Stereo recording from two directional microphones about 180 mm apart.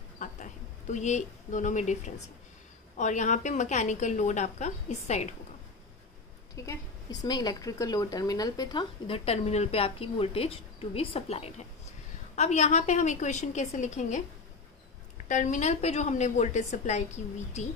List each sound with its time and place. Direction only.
0.2 s a sound: 40° left (ahead or behind)
3.0 s speech: 40° left (ahead or behind)
6.5 s speech: 20° left (ahead or behind); by 14.2 s 40° left (ahead or behind)
15.2 s speech: 45° left (ahead or behind)